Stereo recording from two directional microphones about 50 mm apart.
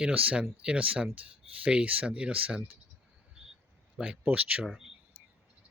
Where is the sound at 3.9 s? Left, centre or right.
Centre.